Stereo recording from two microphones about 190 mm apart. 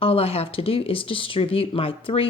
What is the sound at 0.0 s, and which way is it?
A woman's voice, 30° left (ahead or behind).